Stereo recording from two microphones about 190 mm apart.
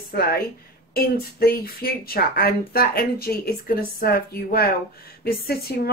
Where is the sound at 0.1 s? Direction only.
50° left (ahead or behind).